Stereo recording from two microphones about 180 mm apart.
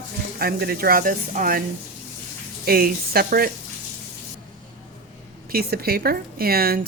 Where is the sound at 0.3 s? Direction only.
55° right (ahead or behind).